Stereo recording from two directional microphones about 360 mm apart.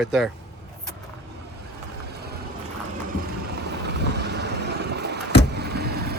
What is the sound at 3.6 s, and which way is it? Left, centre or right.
Vehicle, right.